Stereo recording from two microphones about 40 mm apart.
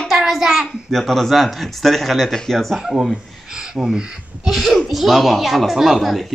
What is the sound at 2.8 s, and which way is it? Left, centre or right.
A child's voice, centre.